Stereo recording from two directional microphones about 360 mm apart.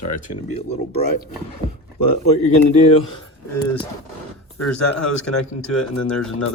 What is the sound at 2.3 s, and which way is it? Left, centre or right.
Speech, centre.